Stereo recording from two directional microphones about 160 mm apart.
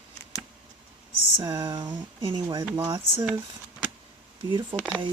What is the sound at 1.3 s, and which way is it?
Speech, 25° right (ahead or behind).